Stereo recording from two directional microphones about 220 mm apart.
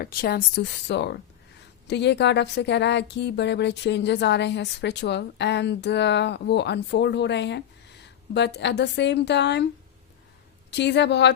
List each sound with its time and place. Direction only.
0.0 s speech: 45° left (ahead or behind)
10.7 s speech: 50° left (ahead or behind)